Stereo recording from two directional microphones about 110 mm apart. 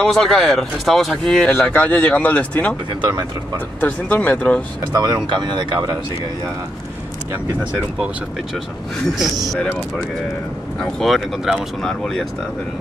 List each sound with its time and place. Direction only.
0.0 s speech: 5° left (ahead or behind)
1.5 s speech: 20° left (ahead or behind)
3.0 s speech: 35° right (ahead or behind)
3.8 s speech: 15° left (ahead or behind)
4.9 s speech: 40° right (ahead or behind)
9.1 s speech: centre (ahead or behind)
10.8 s speech: centre (ahead or behind)